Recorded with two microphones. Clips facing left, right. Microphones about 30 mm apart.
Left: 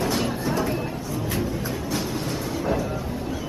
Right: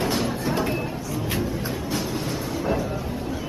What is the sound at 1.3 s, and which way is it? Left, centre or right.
Music, centre.